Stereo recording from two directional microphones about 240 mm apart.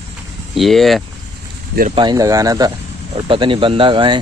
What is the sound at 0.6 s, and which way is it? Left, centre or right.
Speech, centre.